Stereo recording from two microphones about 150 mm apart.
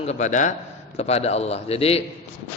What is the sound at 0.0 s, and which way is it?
Speech, 50° left (ahead or behind).